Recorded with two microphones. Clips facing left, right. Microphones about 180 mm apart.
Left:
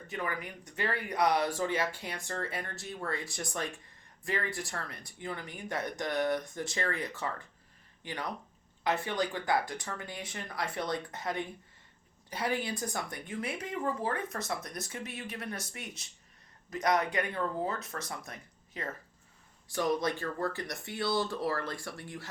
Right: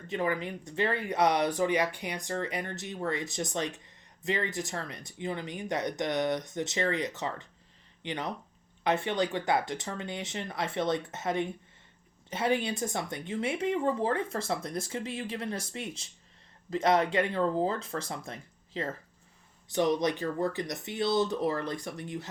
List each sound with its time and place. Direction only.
0.1 s speech: 25° right (ahead or behind)